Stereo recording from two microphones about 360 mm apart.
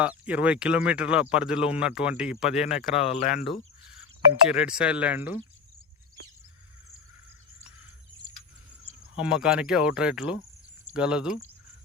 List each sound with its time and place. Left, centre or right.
0.0 s speech: centre
2.9 s speech: centre
4.4 s speech: centre
9.1 s speech: centre